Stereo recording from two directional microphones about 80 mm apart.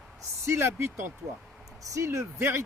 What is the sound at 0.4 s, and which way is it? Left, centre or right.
Speech, right.